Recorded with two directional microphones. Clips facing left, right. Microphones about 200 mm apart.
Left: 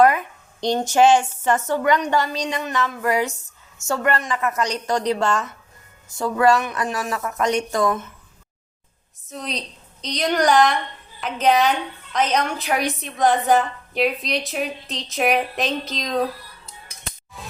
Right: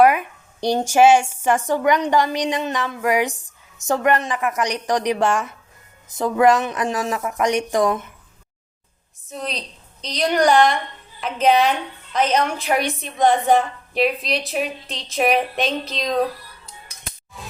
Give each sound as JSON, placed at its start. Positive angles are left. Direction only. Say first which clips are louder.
{"t": 0.0, "sound": "speech", "louder": "right 1 dB", "side_deg": -10}
{"t": 9.3, "sound": "a woman's voice", "louder": "right 1 dB", "side_deg": 0}